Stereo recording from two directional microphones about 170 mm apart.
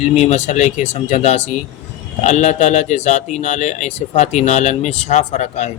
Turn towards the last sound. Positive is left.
turn(degrees=40)  # may be behind; listen again after turning